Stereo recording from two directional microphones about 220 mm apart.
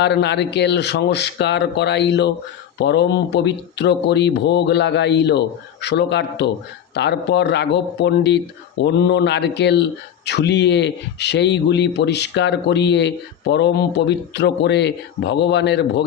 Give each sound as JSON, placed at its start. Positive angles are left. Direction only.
{"t": 0.0, "sound": "speech", "side_deg": 50}